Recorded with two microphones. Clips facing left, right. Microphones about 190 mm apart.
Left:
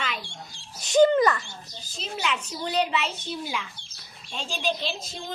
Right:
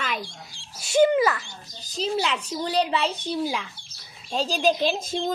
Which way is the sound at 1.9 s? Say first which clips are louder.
Right 5 dB; 35° right (ahead or behind).